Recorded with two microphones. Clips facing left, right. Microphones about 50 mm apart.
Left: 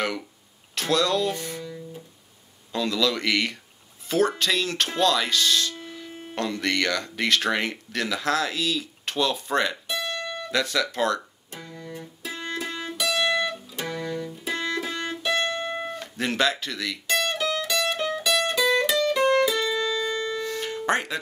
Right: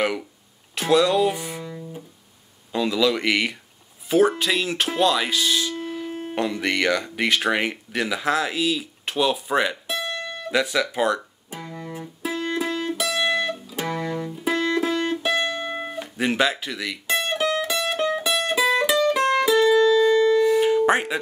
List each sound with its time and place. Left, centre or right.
0.7 s speech: centre
5.8 s a sound: right
6.3 s speech: centre
11.5 s music: right